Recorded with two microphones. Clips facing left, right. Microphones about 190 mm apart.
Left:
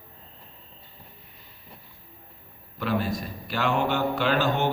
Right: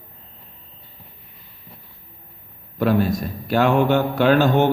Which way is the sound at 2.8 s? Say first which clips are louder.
Right 8 dB; 45° right (ahead or behind).